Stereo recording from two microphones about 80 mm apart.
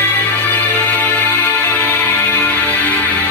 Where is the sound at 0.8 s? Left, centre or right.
Centre.